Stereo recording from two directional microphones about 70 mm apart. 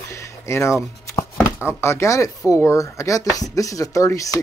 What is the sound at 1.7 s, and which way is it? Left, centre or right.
Speech, left.